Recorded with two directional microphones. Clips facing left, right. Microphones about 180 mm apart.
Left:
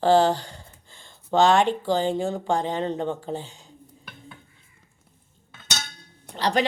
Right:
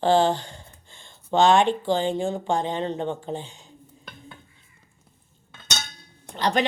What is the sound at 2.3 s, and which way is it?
Speech, 25° right (ahead or behind).